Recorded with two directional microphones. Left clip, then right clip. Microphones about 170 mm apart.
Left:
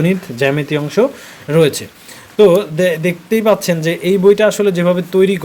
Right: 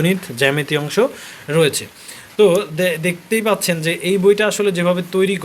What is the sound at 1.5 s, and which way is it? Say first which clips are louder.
A man's voice: left 3 dB; 20° left (ahead or behind).